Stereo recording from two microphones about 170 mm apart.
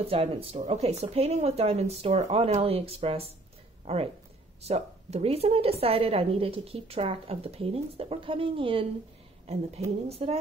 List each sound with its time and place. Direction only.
0.0 s a woman's voice: 35° right (ahead or behind)
10.0 s a woman's voice: 35° right (ahead or behind)